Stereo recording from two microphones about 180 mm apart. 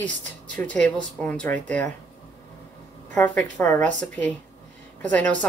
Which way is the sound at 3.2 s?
10° left (ahead or behind).